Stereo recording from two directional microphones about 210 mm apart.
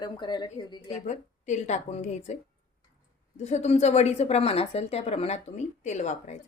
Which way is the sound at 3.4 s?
30° left (ahead or behind).